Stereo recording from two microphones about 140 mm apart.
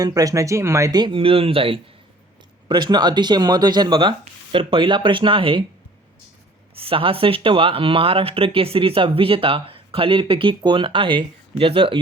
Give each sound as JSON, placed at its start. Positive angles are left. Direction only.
{"t": 0.0, "sound": "speech", "side_deg": -25}
{"t": 6.7, "sound": "speech", "side_deg": -40}